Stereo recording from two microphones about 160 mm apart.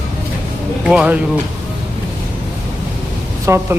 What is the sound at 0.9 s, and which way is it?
Speech, 5° right (ahead or behind).